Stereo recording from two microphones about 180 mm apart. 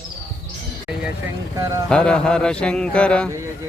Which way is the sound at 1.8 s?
5° left (ahead or behind).